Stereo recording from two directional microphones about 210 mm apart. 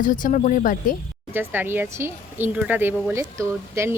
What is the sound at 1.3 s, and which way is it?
Speech, 10° right (ahead or behind).